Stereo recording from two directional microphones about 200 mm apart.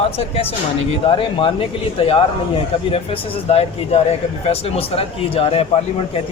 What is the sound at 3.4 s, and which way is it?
Speech, 30° left (ahead or behind).